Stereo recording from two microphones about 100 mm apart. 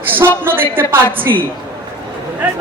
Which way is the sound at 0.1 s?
20° right (ahead or behind).